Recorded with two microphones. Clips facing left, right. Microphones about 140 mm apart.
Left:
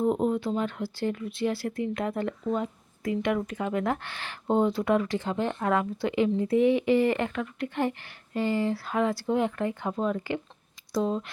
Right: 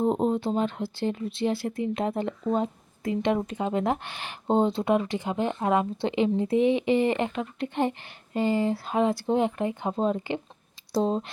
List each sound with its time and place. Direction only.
0.0 s speech: 25° right (ahead or behind)